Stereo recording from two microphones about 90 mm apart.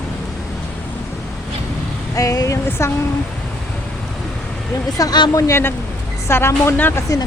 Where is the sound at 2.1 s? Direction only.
40° left (ahead or behind).